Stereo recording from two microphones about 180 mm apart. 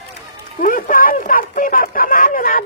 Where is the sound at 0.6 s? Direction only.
50° left (ahead or behind).